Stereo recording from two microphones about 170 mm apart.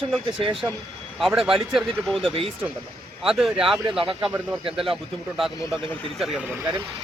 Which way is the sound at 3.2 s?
5° right (ahead or behind).